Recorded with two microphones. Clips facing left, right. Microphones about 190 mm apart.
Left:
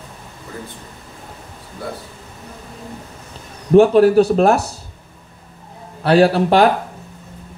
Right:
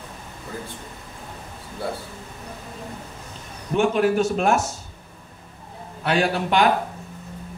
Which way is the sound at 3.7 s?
35° left (ahead or behind).